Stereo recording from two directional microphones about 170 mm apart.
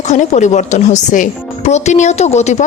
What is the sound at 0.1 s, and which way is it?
A woman's voice, 45° left (ahead or behind).